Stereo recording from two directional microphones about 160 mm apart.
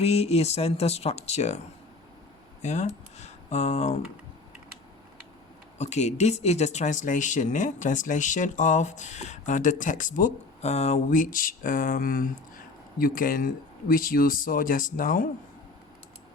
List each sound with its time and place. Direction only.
0.0 s speech: 40° left (ahead or behind)
5.7 s speech: 45° left (ahead or behind)